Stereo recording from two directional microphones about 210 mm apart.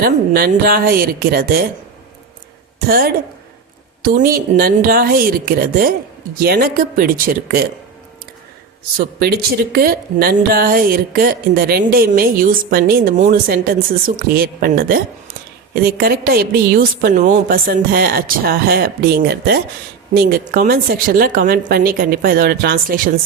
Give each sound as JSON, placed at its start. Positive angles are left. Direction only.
{"t": 0.0, "sound": "speech", "side_deg": -45}
{"t": 2.7, "sound": "a woman's voice", "side_deg": -45}
{"t": 9.0, "sound": "speech", "side_deg": -50}